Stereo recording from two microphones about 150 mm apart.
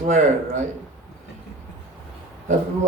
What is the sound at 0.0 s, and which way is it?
Speech, 55° right (ahead or behind).